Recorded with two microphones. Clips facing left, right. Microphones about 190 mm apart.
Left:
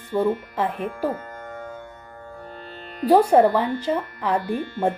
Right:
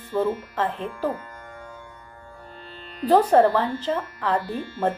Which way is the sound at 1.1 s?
50° left (ahead or behind).